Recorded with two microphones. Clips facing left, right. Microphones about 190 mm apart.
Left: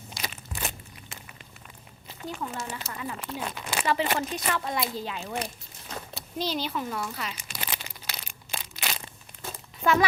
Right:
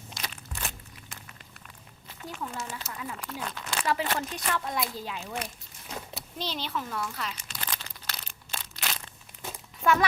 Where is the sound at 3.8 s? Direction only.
Centre (ahead or behind).